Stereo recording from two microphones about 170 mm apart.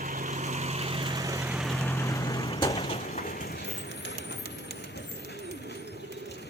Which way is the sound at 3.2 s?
60° left (ahead or behind).